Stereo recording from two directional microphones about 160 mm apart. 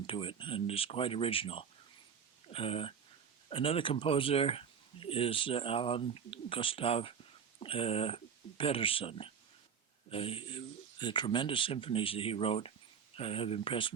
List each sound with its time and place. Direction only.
0.1 s speech: 30° left (ahead or behind)